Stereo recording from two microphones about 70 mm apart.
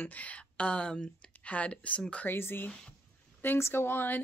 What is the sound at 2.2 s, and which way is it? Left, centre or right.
Speech, left.